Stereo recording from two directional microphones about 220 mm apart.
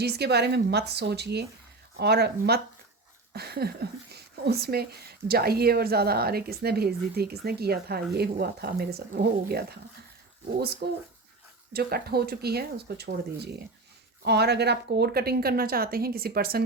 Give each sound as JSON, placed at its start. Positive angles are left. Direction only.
{"t": 0.0, "sound": "speech", "side_deg": -50}
{"t": 10.8, "sound": "speech", "side_deg": -45}